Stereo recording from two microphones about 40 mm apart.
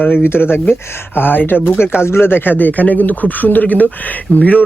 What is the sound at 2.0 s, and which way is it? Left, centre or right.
A man's voice, left.